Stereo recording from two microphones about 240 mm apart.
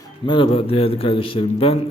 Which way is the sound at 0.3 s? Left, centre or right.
Left.